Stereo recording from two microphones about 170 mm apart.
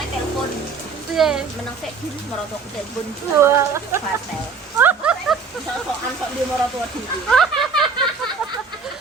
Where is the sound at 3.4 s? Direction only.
15° right (ahead or behind).